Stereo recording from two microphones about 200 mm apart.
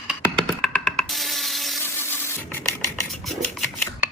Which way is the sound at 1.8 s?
10° left (ahead or behind).